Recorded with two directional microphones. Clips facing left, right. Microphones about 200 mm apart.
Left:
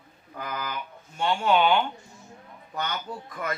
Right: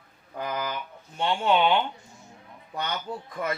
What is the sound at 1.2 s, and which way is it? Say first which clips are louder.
Speech: even; 25° right (ahead or behind).